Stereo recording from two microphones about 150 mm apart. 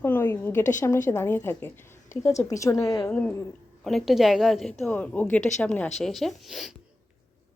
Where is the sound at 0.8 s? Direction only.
15° left (ahead or behind).